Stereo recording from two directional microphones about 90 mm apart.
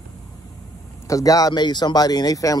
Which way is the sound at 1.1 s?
40° left (ahead or behind).